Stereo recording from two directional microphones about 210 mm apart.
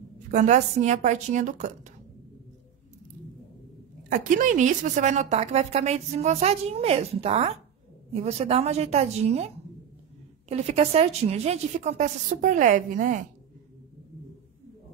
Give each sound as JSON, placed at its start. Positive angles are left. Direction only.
{"t": 0.3, "sound": "a woman's voice", "side_deg": -35}
{"t": 4.1, "sound": "a woman's voice", "side_deg": -35}
{"t": 10.5, "sound": "a woman's voice", "side_deg": -30}